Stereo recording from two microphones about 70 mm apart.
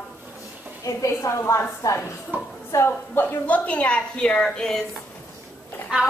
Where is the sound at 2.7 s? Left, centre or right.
Left; by 4.8 s centre.